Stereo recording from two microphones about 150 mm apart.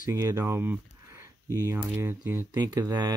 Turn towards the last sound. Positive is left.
turn(degrees=-25)  # may be behind; listen again after turning